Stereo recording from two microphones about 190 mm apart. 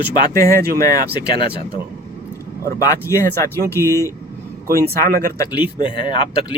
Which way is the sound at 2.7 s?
15° left (ahead or behind).